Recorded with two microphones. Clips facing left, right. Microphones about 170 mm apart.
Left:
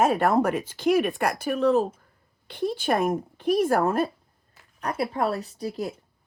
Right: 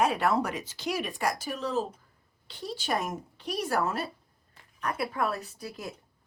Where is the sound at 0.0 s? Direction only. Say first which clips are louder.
Left 5 dB; 45° left (ahead or behind).